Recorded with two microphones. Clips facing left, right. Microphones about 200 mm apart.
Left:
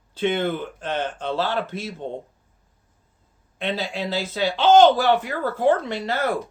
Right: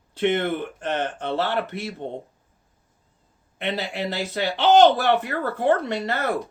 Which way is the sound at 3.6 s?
65° right (ahead or behind).